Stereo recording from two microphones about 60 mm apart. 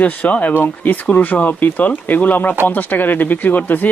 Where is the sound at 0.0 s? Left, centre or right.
Left.